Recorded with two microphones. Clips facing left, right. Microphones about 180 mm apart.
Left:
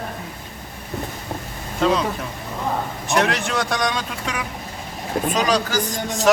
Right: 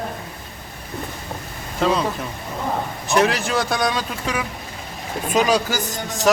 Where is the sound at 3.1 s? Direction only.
Centre (ahead or behind).